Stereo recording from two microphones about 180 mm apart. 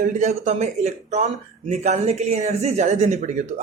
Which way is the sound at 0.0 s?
40° right (ahead or behind).